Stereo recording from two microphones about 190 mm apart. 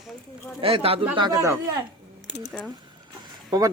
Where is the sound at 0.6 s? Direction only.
30° right (ahead or behind).